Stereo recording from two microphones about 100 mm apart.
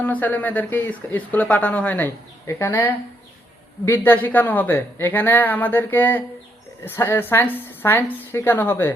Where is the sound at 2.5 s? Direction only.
25° left (ahead or behind).